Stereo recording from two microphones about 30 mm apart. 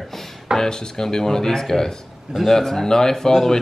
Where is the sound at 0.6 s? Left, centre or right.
Left.